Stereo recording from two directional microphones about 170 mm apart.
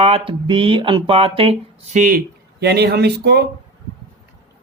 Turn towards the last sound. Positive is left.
turn(degrees=-75)  # may be behind; listen again after turning